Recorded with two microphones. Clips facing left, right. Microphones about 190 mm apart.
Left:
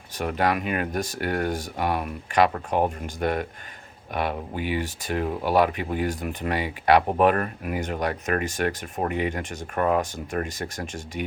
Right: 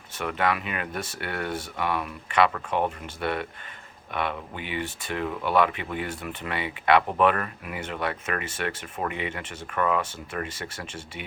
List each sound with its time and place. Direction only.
0.2 s speech: 40° left (ahead or behind)